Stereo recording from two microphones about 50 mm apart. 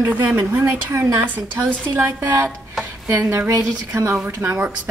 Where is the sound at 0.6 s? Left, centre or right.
Right.